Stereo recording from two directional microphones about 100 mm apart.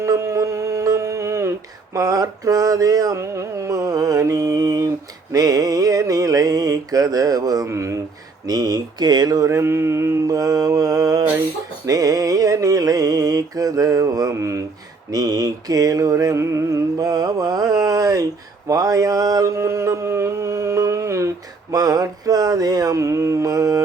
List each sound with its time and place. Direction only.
0.0 s a sound: 30° right (ahead or behind)
5.3 s mantra: 40° right (ahead or behind)
8.4 s mantra: 40° right (ahead or behind)